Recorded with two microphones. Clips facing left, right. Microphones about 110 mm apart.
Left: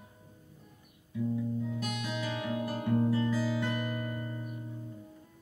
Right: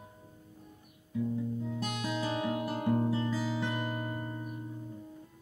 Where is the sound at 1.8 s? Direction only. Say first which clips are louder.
Right 2 dB; 40° right (ahead or behind).